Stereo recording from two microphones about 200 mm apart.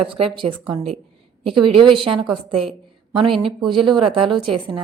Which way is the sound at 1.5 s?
25° right (ahead or behind).